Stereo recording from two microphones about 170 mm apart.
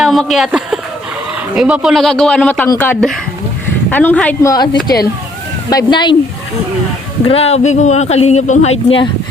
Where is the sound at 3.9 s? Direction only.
10° left (ahead or behind).